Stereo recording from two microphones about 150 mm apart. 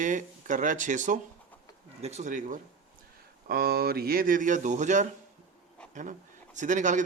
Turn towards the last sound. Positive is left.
turn(degrees=-55)  # may be behind; listen again after turning